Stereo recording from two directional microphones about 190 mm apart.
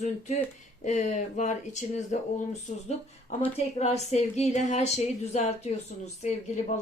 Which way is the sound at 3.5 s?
35° left (ahead or behind).